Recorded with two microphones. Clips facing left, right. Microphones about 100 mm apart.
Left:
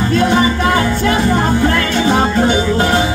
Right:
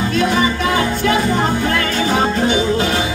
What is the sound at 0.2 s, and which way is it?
Music, 30° left (ahead or behind).